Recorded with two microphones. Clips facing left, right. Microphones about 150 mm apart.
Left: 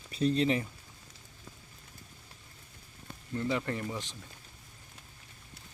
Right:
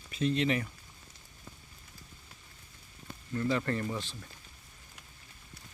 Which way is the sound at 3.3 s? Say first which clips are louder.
Right 1 dB; 25° left (ahead or behind).